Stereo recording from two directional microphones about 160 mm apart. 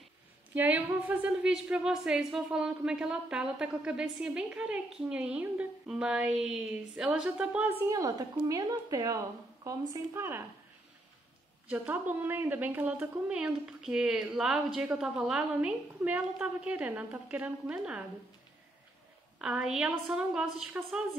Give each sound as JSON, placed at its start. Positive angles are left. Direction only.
{"t": 0.6, "sound": "a woman's voice", "side_deg": -10}
{"t": 7.9, "sound": "a woman's voice", "side_deg": -20}
{"t": 11.7, "sound": "a woman's voice", "side_deg": -10}
{"t": 19.3, "sound": "a woman's voice", "side_deg": -5}